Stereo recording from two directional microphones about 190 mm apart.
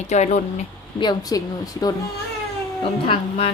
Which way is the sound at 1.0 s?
20° left (ahead or behind).